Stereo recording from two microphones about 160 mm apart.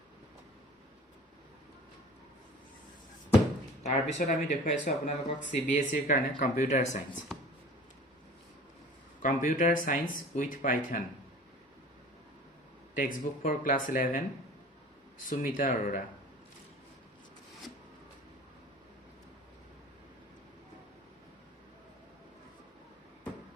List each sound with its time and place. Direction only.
3.8 s speech: 45° left (ahead or behind)
9.2 s speech: 50° left (ahead or behind)
13.0 s speech: 55° left (ahead or behind)
15.2 s speech: 55° left (ahead or behind)